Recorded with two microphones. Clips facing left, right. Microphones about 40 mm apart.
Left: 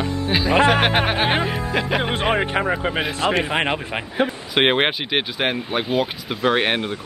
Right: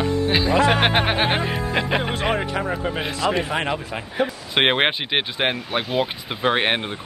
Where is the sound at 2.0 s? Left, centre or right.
Left.